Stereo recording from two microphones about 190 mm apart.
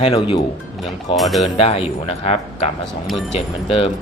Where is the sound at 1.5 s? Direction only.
30° left (ahead or behind).